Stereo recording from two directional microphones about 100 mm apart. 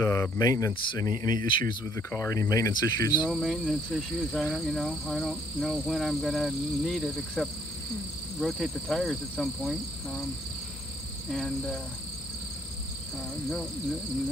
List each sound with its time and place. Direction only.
0.0 s speech: 25° left (ahead or behind)
0.3 s speech: 35° left (ahead or behind)
2.0 s speech: 30° left (ahead or behind)
3.2 s speech: centre (ahead or behind)
11.3 s speech: 5° left (ahead or behind)